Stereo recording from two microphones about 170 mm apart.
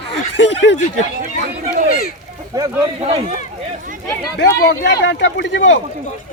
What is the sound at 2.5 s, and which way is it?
Speech, 20° right (ahead or behind).